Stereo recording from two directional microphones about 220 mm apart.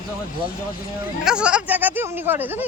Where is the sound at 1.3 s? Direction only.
5° right (ahead or behind).